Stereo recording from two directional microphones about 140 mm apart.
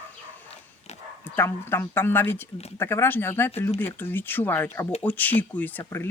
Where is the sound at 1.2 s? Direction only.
15° left (ahead or behind).